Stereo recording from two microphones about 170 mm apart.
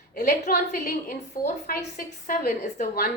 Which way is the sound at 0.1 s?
60° left (ahead or behind).